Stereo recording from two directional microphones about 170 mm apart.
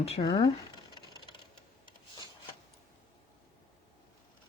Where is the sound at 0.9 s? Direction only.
25° left (ahead or behind).